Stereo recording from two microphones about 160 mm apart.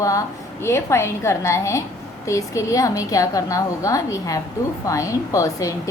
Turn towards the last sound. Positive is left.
turn(degrees=20)  # may be behind; listen again after turning